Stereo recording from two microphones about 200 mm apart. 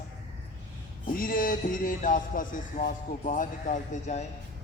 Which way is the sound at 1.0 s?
45° left (ahead or behind).